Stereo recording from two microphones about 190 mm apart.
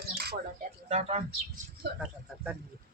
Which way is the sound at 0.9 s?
35° right (ahead or behind).